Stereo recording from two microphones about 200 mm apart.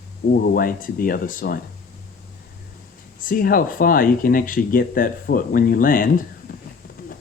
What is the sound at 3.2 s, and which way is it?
Speech, 45° left (ahead or behind).